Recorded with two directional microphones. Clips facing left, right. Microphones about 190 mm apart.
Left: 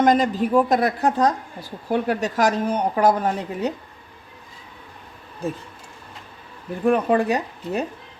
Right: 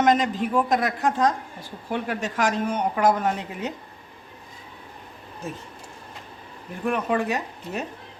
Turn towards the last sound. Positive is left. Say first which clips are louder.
# left 5 dB
turn(degrees=35)  # may be behind; listen again after turning